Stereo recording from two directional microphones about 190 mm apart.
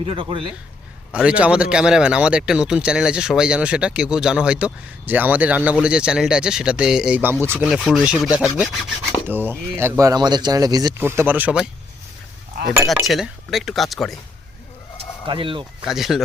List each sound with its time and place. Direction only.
0.0 s speech: 30° right (ahead or behind)
1.1 s speech: 5° right (ahead or behind)
7.6 s sawing: centre (ahead or behind)
13.1 s speech: centre (ahead or behind)
15.3 s speech: 25° right (ahead or behind)
15.8 s speech: centre (ahead or behind)